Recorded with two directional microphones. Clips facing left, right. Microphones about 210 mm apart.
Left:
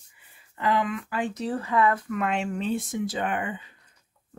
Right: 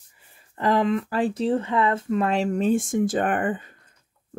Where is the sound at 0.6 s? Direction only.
40° right (ahead or behind).